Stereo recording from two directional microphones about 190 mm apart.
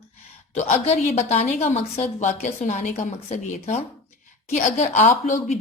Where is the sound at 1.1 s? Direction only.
35° left (ahead or behind).